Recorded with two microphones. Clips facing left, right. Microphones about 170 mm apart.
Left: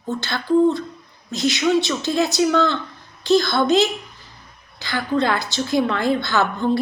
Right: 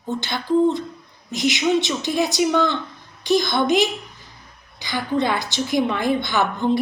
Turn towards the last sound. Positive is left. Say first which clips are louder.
# left 1 dB
turn(degrees=-15)  # may be behind; listen again after turning